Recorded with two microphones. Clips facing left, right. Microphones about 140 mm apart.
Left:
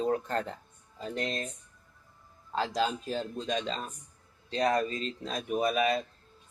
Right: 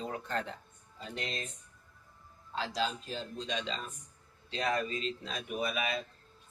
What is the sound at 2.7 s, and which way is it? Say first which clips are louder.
Speech: left 4 dB; 50° left (ahead or behind).